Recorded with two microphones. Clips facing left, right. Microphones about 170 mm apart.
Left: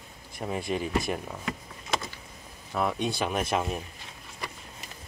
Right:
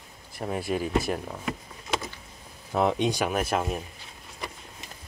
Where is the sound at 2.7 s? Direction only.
20° right (ahead or behind).